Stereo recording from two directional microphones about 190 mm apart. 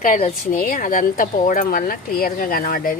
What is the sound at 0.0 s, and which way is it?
Speech, 45° left (ahead or behind).